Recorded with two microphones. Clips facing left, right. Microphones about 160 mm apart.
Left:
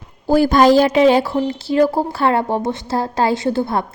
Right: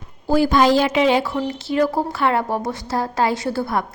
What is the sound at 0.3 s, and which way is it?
Speech, 45° left (ahead or behind).